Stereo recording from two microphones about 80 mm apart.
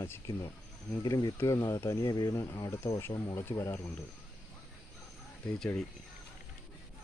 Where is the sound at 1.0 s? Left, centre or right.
Left.